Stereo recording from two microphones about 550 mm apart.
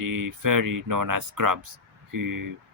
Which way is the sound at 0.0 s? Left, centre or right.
Right.